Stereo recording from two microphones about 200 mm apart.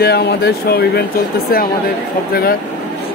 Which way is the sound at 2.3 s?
50° left (ahead or behind).